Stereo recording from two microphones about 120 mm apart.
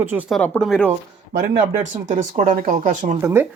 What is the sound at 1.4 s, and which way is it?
Speech, 90° right.